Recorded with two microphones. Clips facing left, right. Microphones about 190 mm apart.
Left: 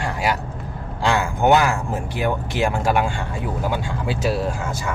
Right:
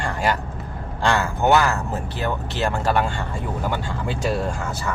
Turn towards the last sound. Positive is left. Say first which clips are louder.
# left 1 dB
turn(degrees=5)  # may be behind; listen again after turning